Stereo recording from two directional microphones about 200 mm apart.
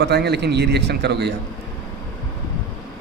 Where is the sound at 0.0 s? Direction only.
55° right (ahead or behind).